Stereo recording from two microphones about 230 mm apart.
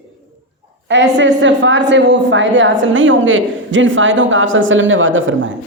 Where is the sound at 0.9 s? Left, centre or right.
Right.